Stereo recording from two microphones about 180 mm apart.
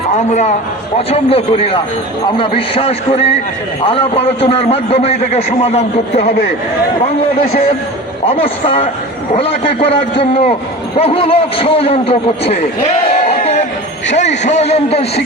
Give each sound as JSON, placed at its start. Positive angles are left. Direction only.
{"t": 0.2, "sound": "a man's voice", "side_deg": 40}
{"t": 8.3, "sound": "a man's voice", "side_deg": 30}
{"t": 10.2, "sound": "a man's voice", "side_deg": 30}
{"t": 13.4, "sound": "a sound", "side_deg": 40}
{"t": 14.1, "sound": "a man's voice", "side_deg": 40}